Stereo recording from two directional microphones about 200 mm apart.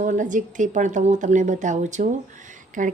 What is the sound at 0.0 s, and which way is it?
A woman's voice, 40° right (ahead or behind).